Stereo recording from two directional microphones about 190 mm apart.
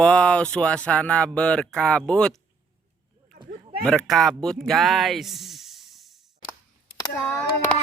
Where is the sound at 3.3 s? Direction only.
40° right (ahead or behind).